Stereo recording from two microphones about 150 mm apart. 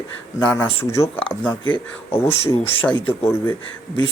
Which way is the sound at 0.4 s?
10° left (ahead or behind).